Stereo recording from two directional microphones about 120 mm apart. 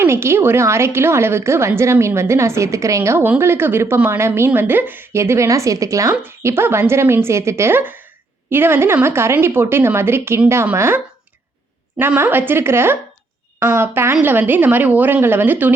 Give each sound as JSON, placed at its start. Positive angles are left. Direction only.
{"t": 0.0, "sound": "a woman's voice", "side_deg": -20}